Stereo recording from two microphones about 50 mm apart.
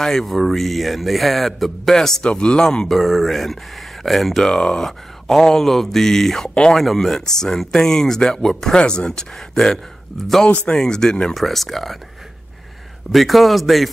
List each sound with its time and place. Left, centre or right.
0.0 s a man's voice: centre
2.2 s speech: centre
3.0 s a man's voice: centre
4.5 s speech: centre
6.5 s speech: centre
6.8 s speech: centre
13.1 s a man's voice: centre